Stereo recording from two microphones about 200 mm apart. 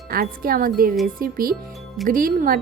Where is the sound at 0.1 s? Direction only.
45° right (ahead or behind).